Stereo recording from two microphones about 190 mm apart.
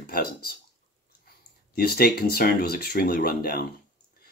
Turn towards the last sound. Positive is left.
turn(degrees=55)  # may be behind; listen again after turning